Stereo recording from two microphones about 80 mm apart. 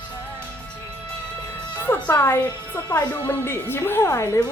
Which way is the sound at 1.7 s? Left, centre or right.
Left.